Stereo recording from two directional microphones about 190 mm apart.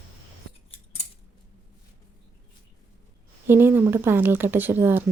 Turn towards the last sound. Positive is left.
turn(degrees=-10)  # may be behind; listen again after turning